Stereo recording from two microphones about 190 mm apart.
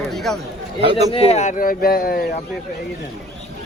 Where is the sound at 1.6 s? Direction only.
50° left (ahead or behind).